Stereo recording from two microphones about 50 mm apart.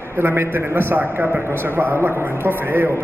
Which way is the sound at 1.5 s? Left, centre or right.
Right.